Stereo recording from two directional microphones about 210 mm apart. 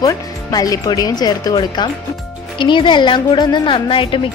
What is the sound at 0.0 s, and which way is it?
A woman's voice, 15° left (ahead or behind).